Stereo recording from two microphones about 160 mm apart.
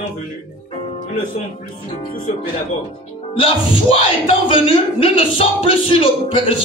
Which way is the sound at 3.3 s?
35° left (ahead or behind).